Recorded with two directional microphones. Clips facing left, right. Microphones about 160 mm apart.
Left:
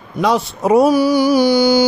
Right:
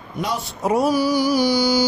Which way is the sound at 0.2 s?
90° left.